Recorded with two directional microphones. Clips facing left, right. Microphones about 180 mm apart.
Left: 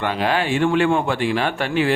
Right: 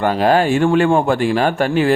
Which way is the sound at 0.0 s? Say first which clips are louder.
Right 7 dB; 40° right (ahead or behind).